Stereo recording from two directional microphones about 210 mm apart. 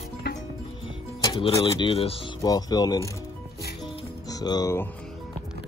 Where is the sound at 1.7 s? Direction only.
25° left (ahead or behind).